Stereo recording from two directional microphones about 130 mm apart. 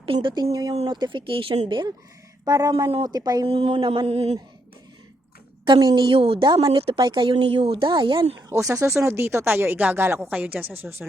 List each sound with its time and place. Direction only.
0.0 s speech: 40° right (ahead or behind)
0.5 s a woman's voice: 30° right (ahead or behind)
3.4 s a sound: 45° right (ahead or behind)
5.6 s a woman's voice: 35° right (ahead or behind)
8.4 s a woman's voice: 25° right (ahead or behind)